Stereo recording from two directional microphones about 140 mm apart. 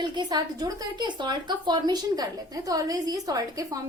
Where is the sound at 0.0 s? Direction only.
30° right (ahead or behind).